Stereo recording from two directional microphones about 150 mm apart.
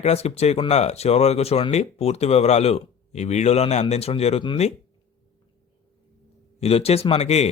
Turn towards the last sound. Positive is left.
turn(degrees=45)  # may be behind; listen again after turning